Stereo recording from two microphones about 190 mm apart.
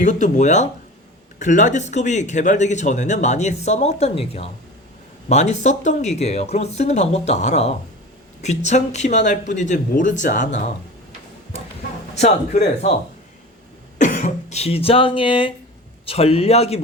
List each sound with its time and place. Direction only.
0.0 s speech: 40° left (ahead or behind)
14.0 s speech: 40° left (ahead or behind)